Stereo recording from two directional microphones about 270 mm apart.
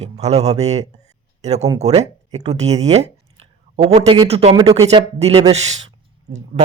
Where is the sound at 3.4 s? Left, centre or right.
Right.